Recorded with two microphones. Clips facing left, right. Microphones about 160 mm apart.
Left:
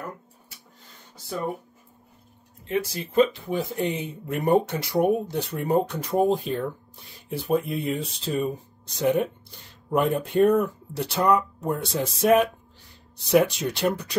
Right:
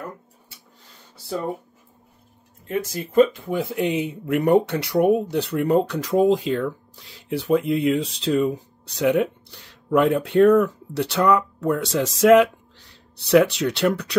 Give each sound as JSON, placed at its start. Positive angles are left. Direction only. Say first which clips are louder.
{"t": 2.6, "sound": "speech", "louder": "right 1 dB", "side_deg": -45}
{"t": 3.8, "sound": "speech", "louder": "right 5 dB", "side_deg": -65}
{"t": 13.3, "sound": "speech", "louder": "right 4 dB", "side_deg": -70}